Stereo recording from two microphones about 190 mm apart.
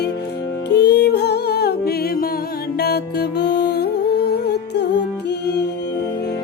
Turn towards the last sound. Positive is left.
turn(degrees=65)  # may be behind; listen again after turning